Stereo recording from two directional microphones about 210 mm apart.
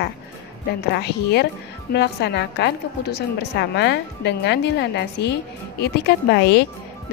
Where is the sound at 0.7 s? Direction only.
50° left (ahead or behind).